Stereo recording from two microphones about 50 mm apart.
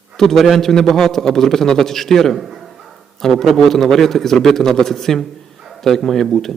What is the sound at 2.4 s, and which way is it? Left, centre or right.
A man's voice, centre.